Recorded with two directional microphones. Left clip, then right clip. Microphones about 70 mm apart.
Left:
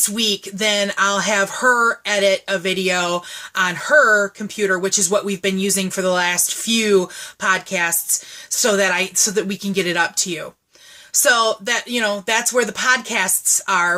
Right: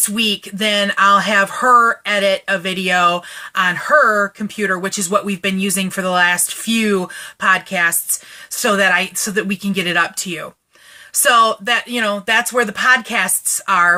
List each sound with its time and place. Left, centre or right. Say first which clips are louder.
0.2 s speech: right 3 dB; left
11.7 s speech: right 3 dB; left